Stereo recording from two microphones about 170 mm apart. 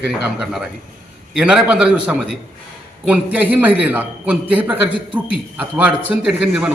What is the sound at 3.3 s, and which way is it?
A man's voice, 10° right (ahead or behind).